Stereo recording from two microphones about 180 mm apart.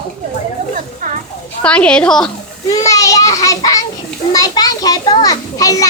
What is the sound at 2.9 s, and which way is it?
A child's voice, 20° left (ahead or behind).